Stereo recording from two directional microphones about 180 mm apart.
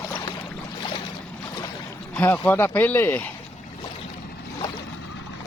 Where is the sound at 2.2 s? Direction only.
10° left (ahead or behind).